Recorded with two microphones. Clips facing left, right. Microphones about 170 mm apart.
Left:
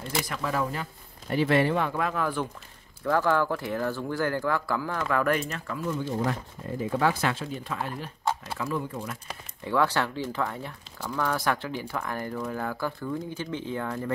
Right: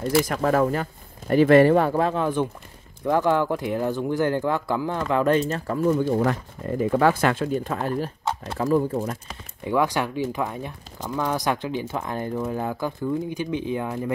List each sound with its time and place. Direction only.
0.0 s speech: 50° right (ahead or behind); by 5.4 s 20° right (ahead or behind)
5.5 s speech: 40° right (ahead or behind)
6.0 s speech: 60° right (ahead or behind); by 9.2 s 40° right (ahead or behind)
9.7 s speech: 15° right (ahead or behind)